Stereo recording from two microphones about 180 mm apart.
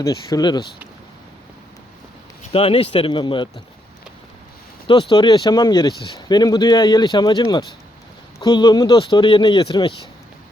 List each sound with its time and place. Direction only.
0.0 s speech: 20° left (ahead or behind)
2.5 s speech: 30° left (ahead or behind)
4.9 s speech: 25° left (ahead or behind)